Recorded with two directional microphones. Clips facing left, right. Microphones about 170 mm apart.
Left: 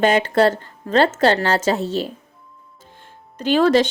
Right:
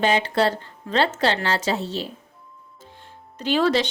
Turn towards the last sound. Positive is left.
turn(degrees=50)  # may be behind; listen again after turning